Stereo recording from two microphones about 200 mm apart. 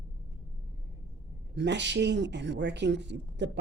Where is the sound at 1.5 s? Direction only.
60° right (ahead or behind).